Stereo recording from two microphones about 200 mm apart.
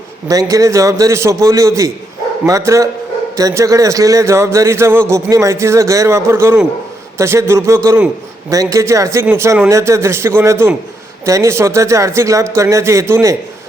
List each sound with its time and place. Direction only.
0.3 s a man's voice: 15° right (ahead or behind)
8.4 s a man's voice: 15° right (ahead or behind)